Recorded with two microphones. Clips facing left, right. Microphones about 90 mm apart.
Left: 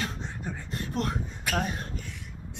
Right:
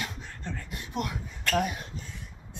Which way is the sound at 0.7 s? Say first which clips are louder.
Left 4 dB; 35° left (ahead or behind).